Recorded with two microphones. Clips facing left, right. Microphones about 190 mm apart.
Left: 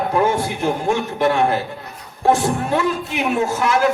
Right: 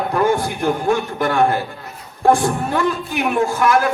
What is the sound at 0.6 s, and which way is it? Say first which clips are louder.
A man's voice: right 1 dB; 50° right (ahead or behind).